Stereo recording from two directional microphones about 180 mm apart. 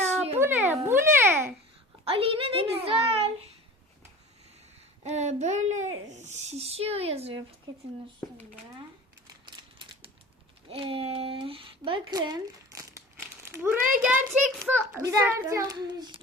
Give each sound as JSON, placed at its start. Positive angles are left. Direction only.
{"t": 0.3, "sound": "a sound", "side_deg": -10}
{"t": 0.9, "sound": "babbling", "side_deg": -15}
{"t": 2.0, "sound": "a child's voice", "side_deg": -30}
{"t": 5.0, "sound": "a child's voice", "side_deg": -40}
{"t": 9.5, "sound": "typewriter", "side_deg": -25}
{"t": 10.7, "sound": "a child's voice", "side_deg": -30}